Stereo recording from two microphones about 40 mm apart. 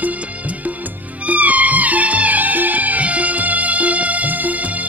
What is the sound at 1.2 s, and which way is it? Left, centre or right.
Music, right.